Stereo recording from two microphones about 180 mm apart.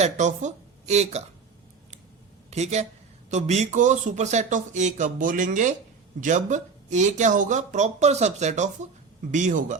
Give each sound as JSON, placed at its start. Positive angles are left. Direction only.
{"t": 0.0, "sound": "speech", "side_deg": -40}
{"t": 2.5, "sound": "speech", "side_deg": -40}